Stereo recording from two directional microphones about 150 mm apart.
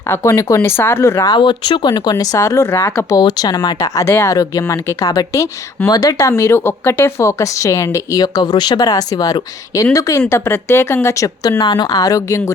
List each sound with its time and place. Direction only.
0.1 s speech: 20° left (ahead or behind)